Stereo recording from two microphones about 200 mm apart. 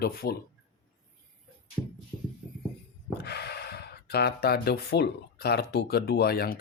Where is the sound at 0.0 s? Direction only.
50° left (ahead or behind).